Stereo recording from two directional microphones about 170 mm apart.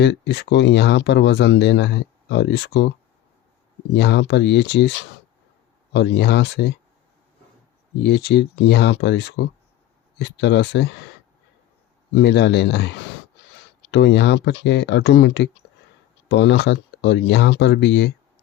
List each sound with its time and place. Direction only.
0.0 s speech: 90° left
3.9 s speech: 85° left
8.0 s speech: 80° left
12.1 s speech: 90° left